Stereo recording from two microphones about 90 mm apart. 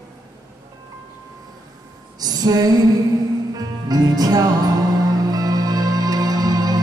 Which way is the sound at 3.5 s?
45° right (ahead or behind).